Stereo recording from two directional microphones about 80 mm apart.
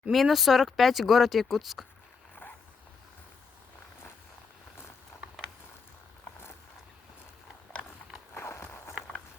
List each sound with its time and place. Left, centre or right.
0.1 s speech: centre
5.1 s a sound: left
8.4 s walk: left